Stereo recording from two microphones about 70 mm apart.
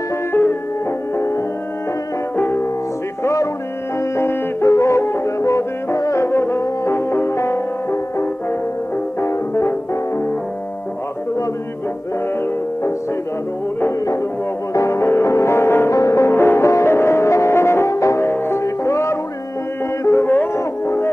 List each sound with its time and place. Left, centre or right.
0.3 s music: left
4.2 s music: left
14.7 s music: left